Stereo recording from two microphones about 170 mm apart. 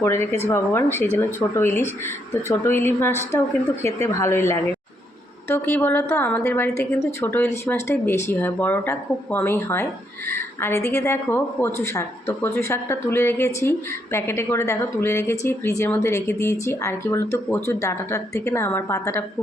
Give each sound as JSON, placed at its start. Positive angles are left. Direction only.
{"t": 0.0, "sound": "a woman's voice", "side_deg": 15}